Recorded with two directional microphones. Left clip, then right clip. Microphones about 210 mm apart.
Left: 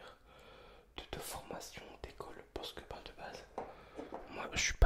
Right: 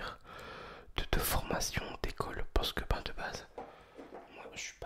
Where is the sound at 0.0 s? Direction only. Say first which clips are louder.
Right 12 dB; 40° right (ahead or behind).